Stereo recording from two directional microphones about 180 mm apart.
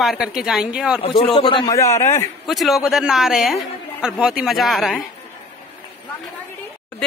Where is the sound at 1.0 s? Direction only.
30° left (ahead or behind).